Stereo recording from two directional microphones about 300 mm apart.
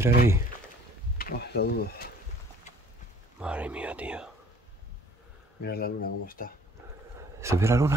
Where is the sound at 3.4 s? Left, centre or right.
Centre.